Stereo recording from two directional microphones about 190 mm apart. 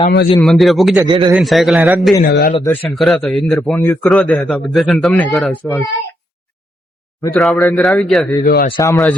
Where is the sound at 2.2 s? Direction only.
55° left (ahead or behind).